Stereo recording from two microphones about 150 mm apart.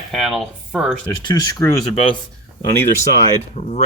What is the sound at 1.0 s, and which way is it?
Speech, 25° left (ahead or behind).